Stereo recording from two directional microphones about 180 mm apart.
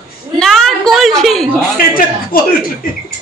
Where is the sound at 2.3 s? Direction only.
55° left (ahead or behind).